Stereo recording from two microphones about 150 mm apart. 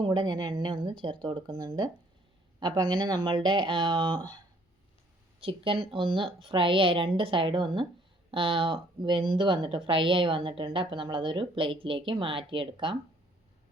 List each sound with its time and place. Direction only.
0.0 s speech: 30° right (ahead or behind)
5.4 s speech: 35° right (ahead or behind)